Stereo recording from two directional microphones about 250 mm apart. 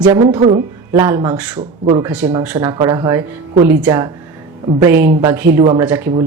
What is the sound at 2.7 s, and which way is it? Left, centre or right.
Speech, centre.